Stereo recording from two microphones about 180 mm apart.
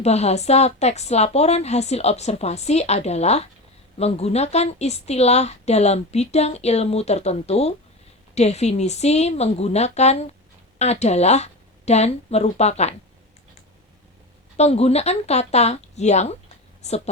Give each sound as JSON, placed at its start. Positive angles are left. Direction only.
{"t": 0.0, "sound": "a woman's voice", "side_deg": 35}
{"t": 14.5, "sound": "a woman's voice", "side_deg": 35}